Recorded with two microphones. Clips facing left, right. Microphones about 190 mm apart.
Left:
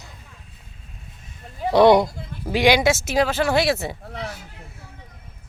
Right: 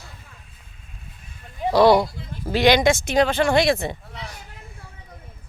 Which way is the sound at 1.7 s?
20° left (ahead or behind).